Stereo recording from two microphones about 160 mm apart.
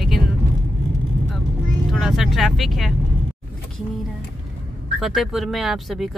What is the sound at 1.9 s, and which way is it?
Speech, centre (ahead or behind).